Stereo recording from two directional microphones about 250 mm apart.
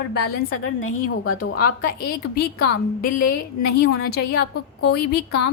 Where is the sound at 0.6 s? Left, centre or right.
Left.